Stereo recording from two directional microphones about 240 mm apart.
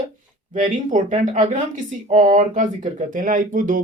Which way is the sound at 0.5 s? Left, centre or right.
Right.